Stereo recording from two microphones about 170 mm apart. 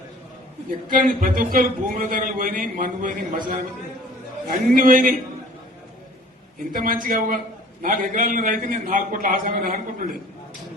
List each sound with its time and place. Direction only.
0.7 s a man's voice: 50° right (ahead or behind)
4.7 s a man's voice: 55° right (ahead or behind)
6.7 s a man's voice: 55° right (ahead or behind)